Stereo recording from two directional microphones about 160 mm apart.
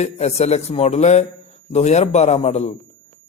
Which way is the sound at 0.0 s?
45° left (ahead or behind).